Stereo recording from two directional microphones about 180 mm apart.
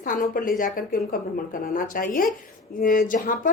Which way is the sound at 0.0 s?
50° left (ahead or behind).